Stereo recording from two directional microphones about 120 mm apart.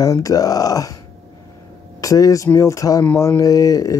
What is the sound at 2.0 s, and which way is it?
Speech, 30° left (ahead or behind).